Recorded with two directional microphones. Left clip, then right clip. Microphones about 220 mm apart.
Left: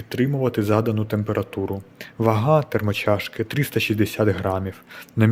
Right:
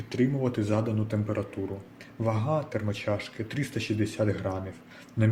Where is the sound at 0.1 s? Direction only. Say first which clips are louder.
Left 6 dB; 45° left (ahead or behind).